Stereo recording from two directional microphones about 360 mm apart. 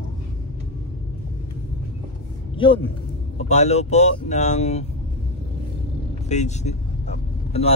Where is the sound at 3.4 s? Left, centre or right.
Centre.